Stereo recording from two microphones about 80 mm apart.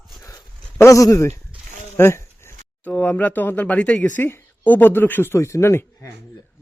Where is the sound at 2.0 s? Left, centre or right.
Left.